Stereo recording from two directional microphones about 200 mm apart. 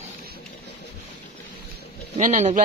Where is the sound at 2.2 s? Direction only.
35° right (ahead or behind).